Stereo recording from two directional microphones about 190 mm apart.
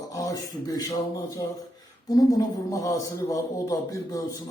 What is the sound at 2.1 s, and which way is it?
A man's voice, 20° left (ahead or behind).